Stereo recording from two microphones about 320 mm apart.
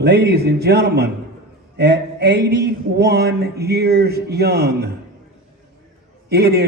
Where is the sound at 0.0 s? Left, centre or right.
Right.